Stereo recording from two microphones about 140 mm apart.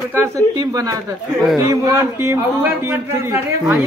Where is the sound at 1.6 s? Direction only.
25° right (ahead or behind).